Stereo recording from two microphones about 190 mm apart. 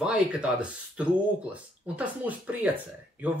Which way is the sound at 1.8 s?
10° right (ahead or behind).